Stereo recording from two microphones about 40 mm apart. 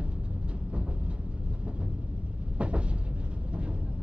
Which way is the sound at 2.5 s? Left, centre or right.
Right.